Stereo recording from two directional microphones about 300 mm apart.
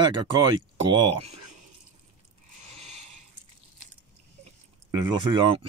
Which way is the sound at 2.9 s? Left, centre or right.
Right.